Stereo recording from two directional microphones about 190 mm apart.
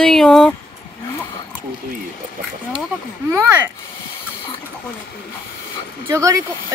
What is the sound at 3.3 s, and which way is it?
Speech, 10° right (ahead or behind).